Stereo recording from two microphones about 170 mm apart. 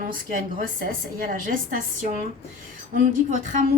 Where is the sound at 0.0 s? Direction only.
50° right (ahead or behind).